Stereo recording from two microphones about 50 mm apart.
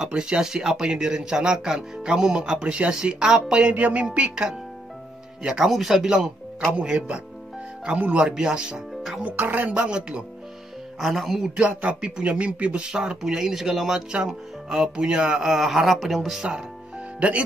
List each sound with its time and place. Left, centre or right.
0.0 s speech: centre
5.4 s speech: centre
9.2 s speech: right
9.8 s speech: right
11.0 s speech: centre
11.5 s speech: right; by 16.4 s centre